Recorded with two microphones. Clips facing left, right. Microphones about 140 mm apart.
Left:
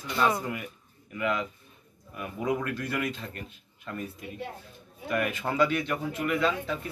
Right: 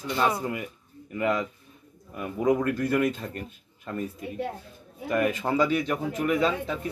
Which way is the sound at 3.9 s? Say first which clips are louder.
Right 4 dB; 35° right (ahead or behind).